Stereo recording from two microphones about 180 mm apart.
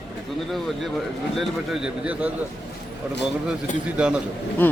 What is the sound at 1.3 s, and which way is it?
A man's voice, centre (ahead or behind).